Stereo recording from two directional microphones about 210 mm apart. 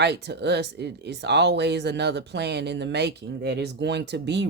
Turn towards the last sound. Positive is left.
turn(degrees=-55)  # may be behind; listen again after turning